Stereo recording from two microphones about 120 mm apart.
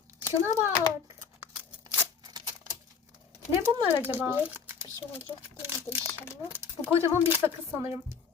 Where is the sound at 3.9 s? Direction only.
15° right (ahead or behind).